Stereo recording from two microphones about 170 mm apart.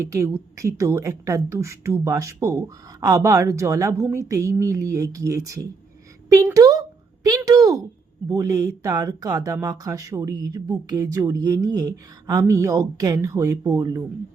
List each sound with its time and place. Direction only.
0.0 s a woman's voice: 15° right (ahead or behind)